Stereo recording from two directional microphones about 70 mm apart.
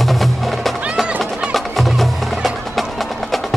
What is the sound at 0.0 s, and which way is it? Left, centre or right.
Music, centre.